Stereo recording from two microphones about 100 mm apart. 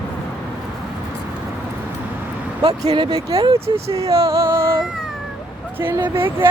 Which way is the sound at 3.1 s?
35° right (ahead or behind).